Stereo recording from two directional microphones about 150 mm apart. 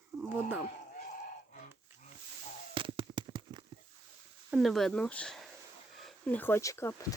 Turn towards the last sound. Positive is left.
turn(degrees=20)  # may be behind; listen again after turning